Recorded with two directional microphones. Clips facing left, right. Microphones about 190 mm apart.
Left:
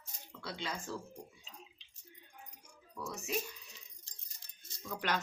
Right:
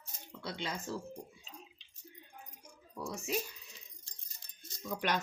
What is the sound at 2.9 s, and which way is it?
Speech, 30° right (ahead or behind).